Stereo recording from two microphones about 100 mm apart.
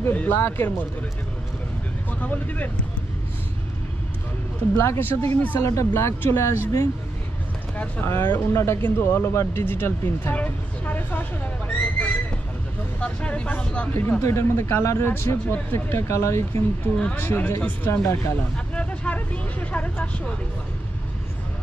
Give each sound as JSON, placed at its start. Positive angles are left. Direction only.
{"t": 0.0, "sound": "speech", "side_deg": 20}
{"t": 2.0, "sound": "speech", "side_deg": 15}
{"t": 4.7, "sound": "speech", "side_deg": 25}
{"t": 7.7, "sound": "speech", "side_deg": 20}
{"t": 14.2, "sound": "speech", "side_deg": 25}
{"t": 18.8, "sound": "vehicle", "side_deg": 15}